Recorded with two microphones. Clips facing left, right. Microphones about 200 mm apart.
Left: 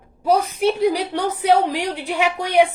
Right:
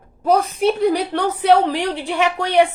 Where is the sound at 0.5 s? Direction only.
10° left (ahead or behind).